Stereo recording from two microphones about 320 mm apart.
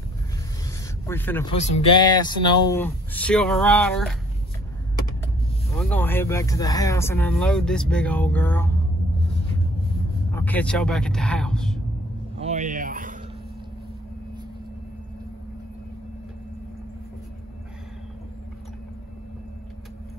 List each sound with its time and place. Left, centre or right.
1.0 s speech: centre
1.5 s speech: centre
5.8 s speech: centre
10.3 s speech: centre
12.4 s a sound: right